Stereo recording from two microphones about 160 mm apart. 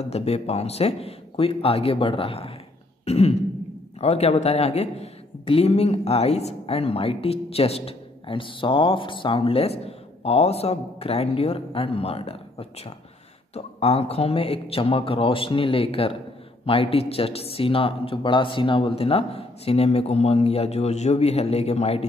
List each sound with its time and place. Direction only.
0.0 s speech: 40° left (ahead or behind)